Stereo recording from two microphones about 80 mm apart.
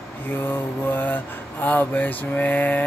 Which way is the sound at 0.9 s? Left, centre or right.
Left.